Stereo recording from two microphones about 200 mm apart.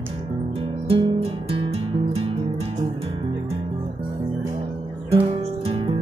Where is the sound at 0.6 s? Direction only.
25° right (ahead or behind).